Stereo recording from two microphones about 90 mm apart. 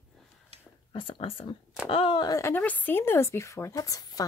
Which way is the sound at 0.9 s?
75° left (ahead or behind).